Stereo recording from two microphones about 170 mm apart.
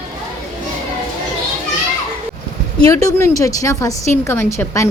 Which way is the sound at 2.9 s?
20° left (ahead or behind).